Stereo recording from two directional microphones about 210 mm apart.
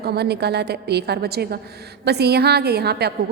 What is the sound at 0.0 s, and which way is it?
A woman's voice, 50° right (ahead or behind).